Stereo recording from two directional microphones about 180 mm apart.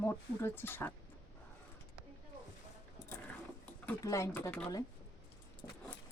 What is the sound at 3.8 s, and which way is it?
Speech, 15° left (ahead or behind).